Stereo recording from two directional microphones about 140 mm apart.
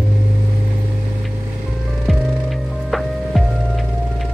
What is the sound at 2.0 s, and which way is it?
Music, centre (ahead or behind).